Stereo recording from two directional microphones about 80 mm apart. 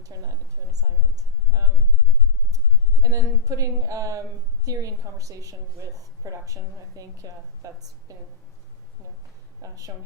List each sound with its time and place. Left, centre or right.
0.1 s a sound: right
3.0 s a woman's voice: right
9.6 s a woman's voice: right